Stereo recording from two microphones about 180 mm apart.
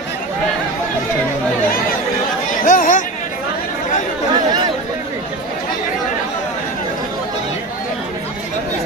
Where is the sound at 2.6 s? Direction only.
50° left (ahead or behind).